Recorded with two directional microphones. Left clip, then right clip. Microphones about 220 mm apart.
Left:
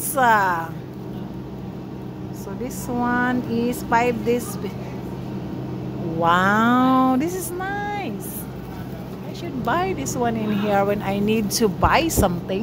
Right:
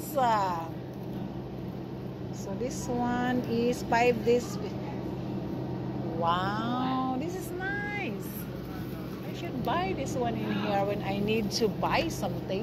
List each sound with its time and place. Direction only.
0.1 s speech: 25° left (ahead or behind)
2.6 s speech: 10° left (ahead or behind)
6.2 s speech: 30° left (ahead or behind)
7.6 s a sound: 10° left (ahead or behind)
9.7 s speech: 25° left (ahead or behind)